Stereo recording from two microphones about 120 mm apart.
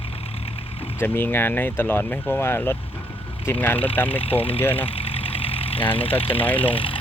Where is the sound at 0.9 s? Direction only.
20° left (ahead or behind).